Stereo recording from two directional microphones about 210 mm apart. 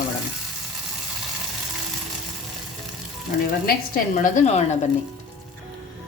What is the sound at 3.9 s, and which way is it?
Speech, 40° left (ahead or behind).